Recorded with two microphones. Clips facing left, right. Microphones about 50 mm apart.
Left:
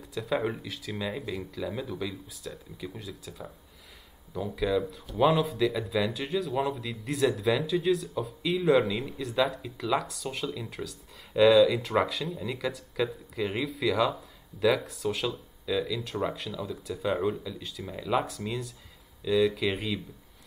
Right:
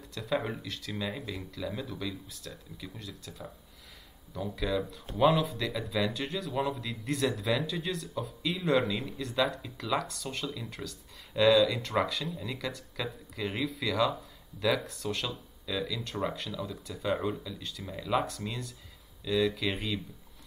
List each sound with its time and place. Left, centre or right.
0.1 s speech: centre